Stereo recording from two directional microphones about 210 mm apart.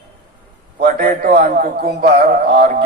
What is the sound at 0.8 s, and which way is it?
A man's voice, 40° right (ahead or behind).